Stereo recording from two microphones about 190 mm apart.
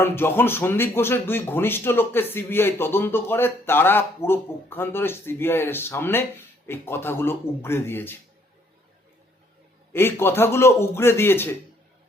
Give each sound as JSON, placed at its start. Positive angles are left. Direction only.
{"t": 0.0, "sound": "speech", "side_deg": 10}
{"t": 9.9, "sound": "speech", "side_deg": 10}